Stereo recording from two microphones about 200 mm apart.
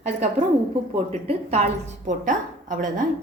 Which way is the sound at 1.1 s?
30° right (ahead or behind).